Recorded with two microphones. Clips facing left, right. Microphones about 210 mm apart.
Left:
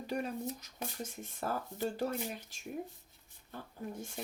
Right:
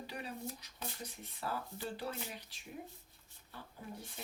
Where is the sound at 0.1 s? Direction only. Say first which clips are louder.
Left 10 dB; 45° left (ahead or behind).